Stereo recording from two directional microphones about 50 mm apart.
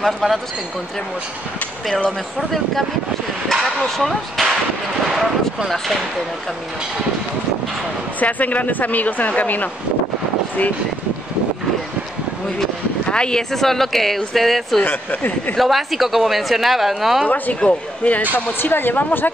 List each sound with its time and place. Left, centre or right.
0.0 s speech: centre
2.0 s speech: centre
8.2 s speech: left
13.1 s speech: centre
14.9 s speech: left
15.5 s speech: centre
17.6 s speech: left
18.3 s speech: left